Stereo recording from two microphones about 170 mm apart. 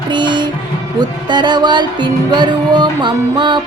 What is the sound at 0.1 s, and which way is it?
Music, 25° right (ahead or behind).